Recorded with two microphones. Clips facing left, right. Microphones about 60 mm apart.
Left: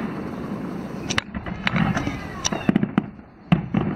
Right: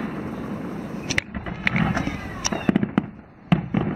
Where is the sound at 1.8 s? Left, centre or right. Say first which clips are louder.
Even; centre.